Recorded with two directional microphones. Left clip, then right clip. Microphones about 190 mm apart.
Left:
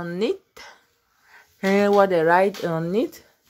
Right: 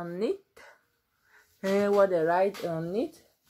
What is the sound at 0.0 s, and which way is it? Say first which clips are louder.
Speech: left 6 dB; 30° left (ahead or behind).